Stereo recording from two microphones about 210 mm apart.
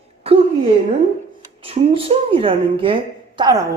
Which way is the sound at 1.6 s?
25° right (ahead or behind).